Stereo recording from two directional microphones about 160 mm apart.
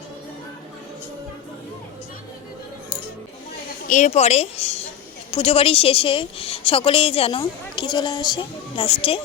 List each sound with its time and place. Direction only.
3.8 s a woman's voice: 50° left (ahead or behind); by 9.2 s 35° left (ahead or behind)